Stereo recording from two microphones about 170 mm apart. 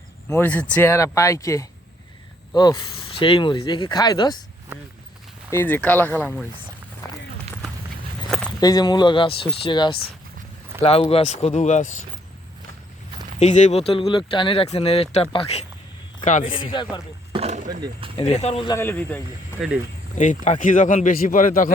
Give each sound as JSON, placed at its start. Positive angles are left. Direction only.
{"t": 0.3, "sound": "speech", "side_deg": 10}
{"t": 5.5, "sound": "speech", "side_deg": 15}
{"t": 8.6, "sound": "speech", "side_deg": 25}
{"t": 13.4, "sound": "speech", "side_deg": 45}
{"t": 16.2, "sound": "speech", "side_deg": 45}
{"t": 16.7, "sound": "speech", "side_deg": 25}
{"t": 17.3, "sound": "roaring cats", "side_deg": -40}
{"t": 18.2, "sound": "speech", "side_deg": 40}
{"t": 18.7, "sound": "speech", "side_deg": 15}
{"t": 19.5, "sound": "speech", "side_deg": -5}
{"t": 20.1, "sound": "speech", "side_deg": 45}